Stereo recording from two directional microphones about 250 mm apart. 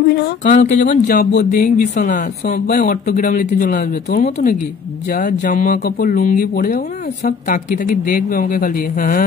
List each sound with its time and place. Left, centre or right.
0.4 s speech: left